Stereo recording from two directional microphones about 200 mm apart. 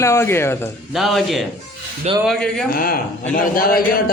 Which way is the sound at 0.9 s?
Centre (ahead or behind).